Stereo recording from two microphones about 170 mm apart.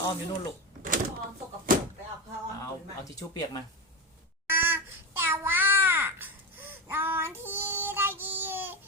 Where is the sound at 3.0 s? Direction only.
20° left (ahead or behind).